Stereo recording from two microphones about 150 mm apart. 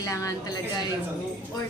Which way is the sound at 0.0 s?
25° left (ahead or behind).